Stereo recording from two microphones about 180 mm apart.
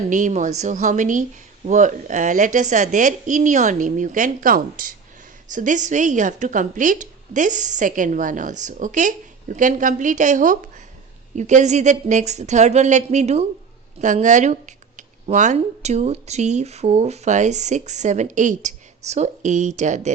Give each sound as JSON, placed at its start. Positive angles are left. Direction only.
{"t": 0.1, "sound": "a woman's voice", "side_deg": -45}